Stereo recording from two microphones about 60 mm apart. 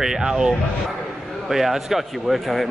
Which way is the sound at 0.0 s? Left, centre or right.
Centre.